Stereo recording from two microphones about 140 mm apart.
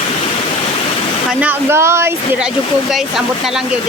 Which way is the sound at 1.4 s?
15° right (ahead or behind).